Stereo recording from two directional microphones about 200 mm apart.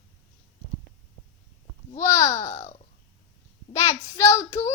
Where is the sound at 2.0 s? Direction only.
15° left (ahead or behind).